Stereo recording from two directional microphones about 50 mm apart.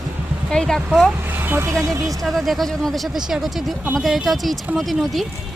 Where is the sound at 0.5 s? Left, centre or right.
Centre.